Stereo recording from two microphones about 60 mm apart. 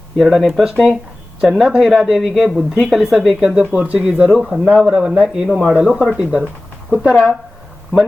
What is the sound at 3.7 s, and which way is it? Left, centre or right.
Speech, right.